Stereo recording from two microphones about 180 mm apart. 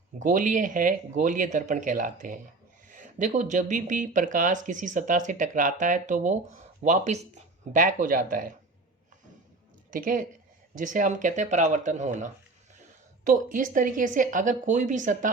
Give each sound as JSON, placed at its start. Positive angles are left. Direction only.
{"t": 0.2, "sound": "speech", "side_deg": -45}
{"t": 9.9, "sound": "speech", "side_deg": -50}